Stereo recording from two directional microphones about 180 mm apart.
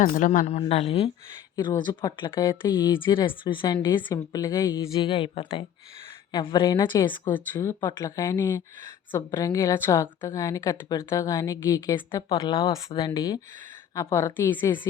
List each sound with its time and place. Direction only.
0.0 s a woman's voice: 45° left (ahead or behind)
1.5 s speech: 25° left (ahead or behind)
7.3 s a woman's voice: 10° left (ahead or behind)